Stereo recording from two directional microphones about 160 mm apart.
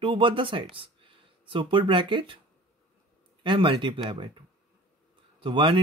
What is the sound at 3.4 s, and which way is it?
Speech, 30° right (ahead or behind).